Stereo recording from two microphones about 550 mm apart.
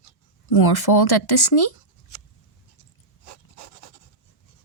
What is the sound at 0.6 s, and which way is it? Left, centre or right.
Speech, left.